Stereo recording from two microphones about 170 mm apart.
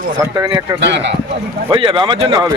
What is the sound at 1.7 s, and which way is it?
Speech, 30° right (ahead or behind).